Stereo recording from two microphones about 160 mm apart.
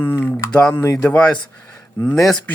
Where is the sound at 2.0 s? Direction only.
Centre (ahead or behind).